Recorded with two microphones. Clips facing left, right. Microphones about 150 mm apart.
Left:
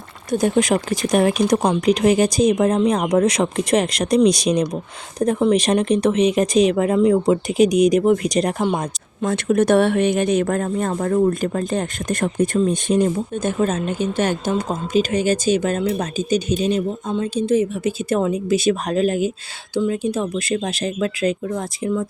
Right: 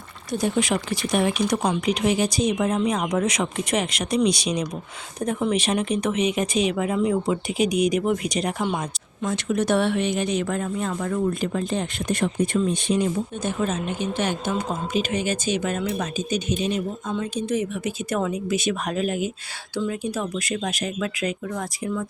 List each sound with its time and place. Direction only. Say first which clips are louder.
0.3 s speech: left 6 dB; 50° left (ahead or behind)
9.2 s speech: left 6 dB; 55° left (ahead or behind); by 19.3 s 35° left (ahead or behind)
19.7 s speech: left 6 dB; 25° left (ahead or behind)